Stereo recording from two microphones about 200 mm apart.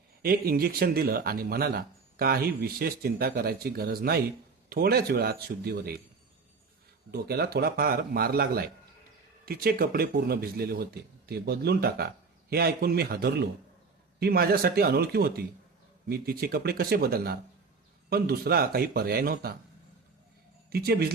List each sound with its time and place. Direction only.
0.2 s speech: 50° right (ahead or behind)
7.1 s speech: 50° right (ahead or behind)
20.7 s speech: 50° right (ahead or behind)